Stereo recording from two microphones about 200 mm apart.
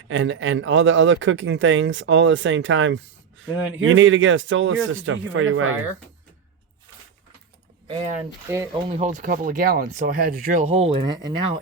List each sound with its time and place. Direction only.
0.1 s speech: 75° right (ahead or behind)
8.4 s speech: 15° right (ahead or behind)
9.0 s speech: 40° right (ahead or behind)
10.7 s speech: 30° right (ahead or behind)